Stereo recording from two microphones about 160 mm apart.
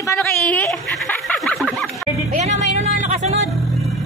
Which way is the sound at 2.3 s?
45° right (ahead or behind).